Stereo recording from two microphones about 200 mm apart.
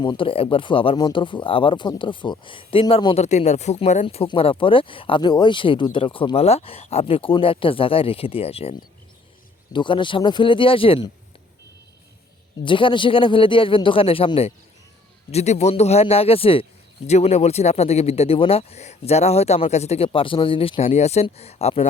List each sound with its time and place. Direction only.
0.0 s speech: 25° left (ahead or behind)
9.7 s speech: 25° left (ahead or behind)
12.6 s speech: 25° left (ahead or behind)